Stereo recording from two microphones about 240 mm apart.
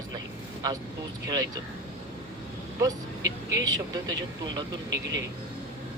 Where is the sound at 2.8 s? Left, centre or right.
Centre.